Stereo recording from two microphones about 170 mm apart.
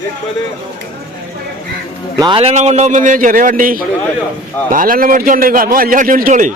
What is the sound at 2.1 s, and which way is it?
A man's voice, 25° right (ahead or behind).